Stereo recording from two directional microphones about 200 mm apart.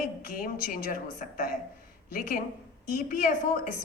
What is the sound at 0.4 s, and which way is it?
Speech, 45° left (ahead or behind).